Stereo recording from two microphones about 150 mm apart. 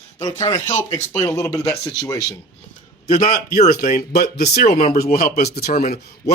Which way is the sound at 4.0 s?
90° left.